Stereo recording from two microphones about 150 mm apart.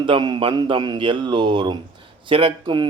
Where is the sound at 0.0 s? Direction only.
30° right (ahead or behind).